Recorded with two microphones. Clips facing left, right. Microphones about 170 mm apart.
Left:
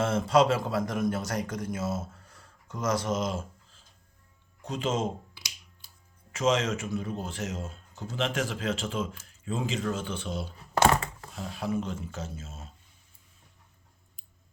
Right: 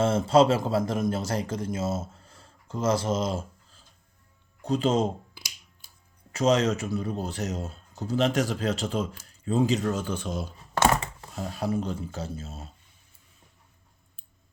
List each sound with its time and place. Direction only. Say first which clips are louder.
0.0 s speech: right 3 dB; 30° right (ahead or behind)
6.3 s speech: right 4 dB; 35° right (ahead or behind)